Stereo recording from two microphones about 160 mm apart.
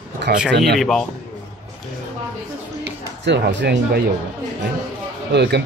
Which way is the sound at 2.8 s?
90° right.